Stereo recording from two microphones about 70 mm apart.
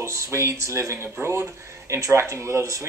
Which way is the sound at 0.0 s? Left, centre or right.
Right.